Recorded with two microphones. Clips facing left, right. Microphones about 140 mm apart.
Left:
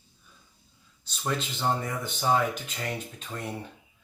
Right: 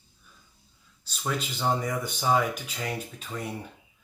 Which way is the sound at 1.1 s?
5° right (ahead or behind).